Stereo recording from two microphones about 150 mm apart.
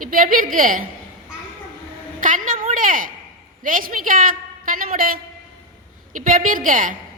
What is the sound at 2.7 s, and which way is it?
A woman's voice, 65° right (ahead or behind).